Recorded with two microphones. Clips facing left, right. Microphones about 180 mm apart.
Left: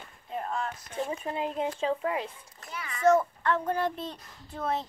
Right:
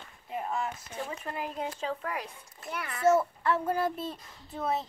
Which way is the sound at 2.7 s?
60° right (ahead or behind).